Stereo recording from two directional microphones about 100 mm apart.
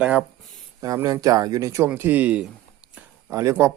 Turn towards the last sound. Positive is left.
turn(degrees=-30)  # may be behind; listen again after turning